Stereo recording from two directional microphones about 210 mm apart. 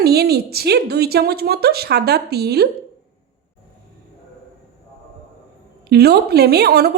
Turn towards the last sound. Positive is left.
turn(degrees=-50)  # may be behind; listen again after turning